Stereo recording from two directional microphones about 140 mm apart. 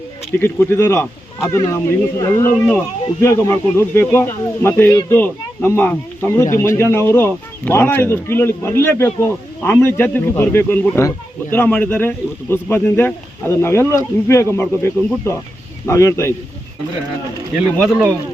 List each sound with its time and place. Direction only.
0.3 s speech: 15° left (ahead or behind)
17.7 s speech: centre (ahead or behind)